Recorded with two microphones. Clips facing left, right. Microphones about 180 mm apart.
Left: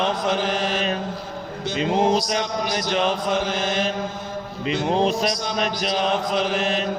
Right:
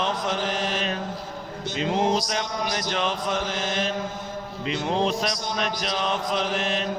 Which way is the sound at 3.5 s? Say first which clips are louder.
Left 4 dB; 35° left (ahead or behind).